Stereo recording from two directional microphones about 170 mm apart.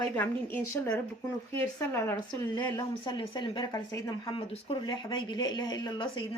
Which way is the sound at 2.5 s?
25° left (ahead or behind).